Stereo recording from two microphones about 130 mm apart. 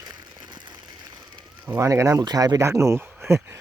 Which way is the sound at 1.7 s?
25° right (ahead or behind).